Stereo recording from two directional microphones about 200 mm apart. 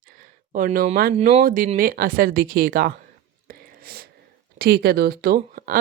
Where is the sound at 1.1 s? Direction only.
30° right (ahead or behind).